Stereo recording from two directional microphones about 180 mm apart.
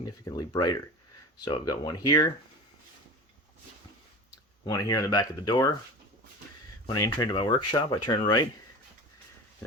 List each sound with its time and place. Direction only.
0.0 s speech: 20° left (ahead or behind)
4.6 s speech: 20° left (ahead or behind)
6.8 s speech: 20° left (ahead or behind)